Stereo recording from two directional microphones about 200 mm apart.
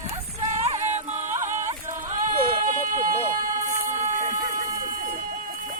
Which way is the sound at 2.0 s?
40° right (ahead or behind).